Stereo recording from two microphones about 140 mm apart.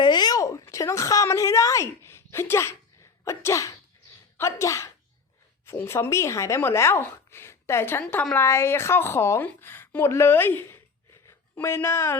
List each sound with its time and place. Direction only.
0.0 s a woman's voice: 30° left (ahead or behind)
8.0 s a woman's voice: 5° left (ahead or behind)
8.4 s speech: 20° left (ahead or behind)